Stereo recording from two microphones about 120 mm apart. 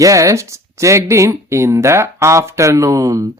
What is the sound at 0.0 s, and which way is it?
Speech, 25° right (ahead or behind).